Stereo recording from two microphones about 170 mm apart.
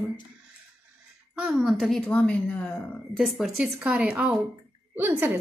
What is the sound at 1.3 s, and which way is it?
A woman's voice, 5° right (ahead or behind).